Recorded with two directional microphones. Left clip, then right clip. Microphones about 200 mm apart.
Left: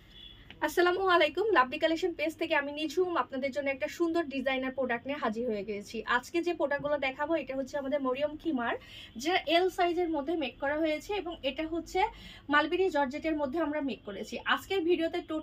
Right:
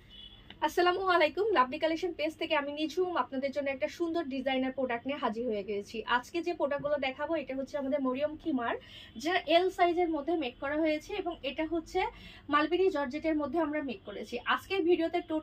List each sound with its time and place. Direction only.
0.6 s a woman's voice: 20° left (ahead or behind)